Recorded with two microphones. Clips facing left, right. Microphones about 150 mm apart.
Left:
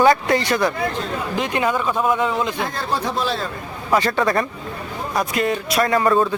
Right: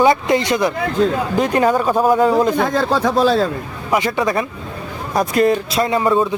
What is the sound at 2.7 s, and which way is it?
Speech, 90° right.